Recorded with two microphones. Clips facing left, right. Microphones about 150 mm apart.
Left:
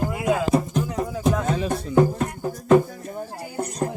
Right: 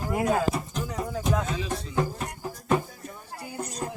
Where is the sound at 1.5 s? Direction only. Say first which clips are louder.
Left 9 dB; 55° left (ahead or behind).